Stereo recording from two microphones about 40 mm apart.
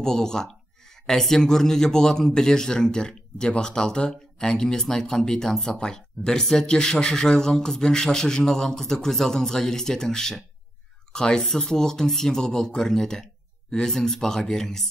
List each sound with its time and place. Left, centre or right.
0.0 s a man's voice: centre